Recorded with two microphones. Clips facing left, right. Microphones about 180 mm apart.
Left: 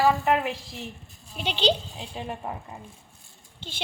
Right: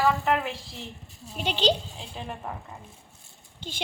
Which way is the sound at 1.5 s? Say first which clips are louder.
Even; 40° right (ahead or behind).